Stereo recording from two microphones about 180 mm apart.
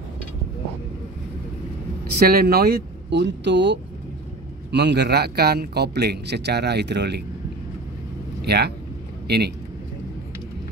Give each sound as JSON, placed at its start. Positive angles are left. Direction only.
{"t": 2.1, "sound": "a man's voice", "side_deg": -60}
{"t": 8.4, "sound": "speech", "side_deg": -65}